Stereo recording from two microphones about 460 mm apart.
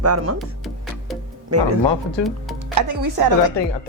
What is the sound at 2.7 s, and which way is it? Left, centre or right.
Speech, right.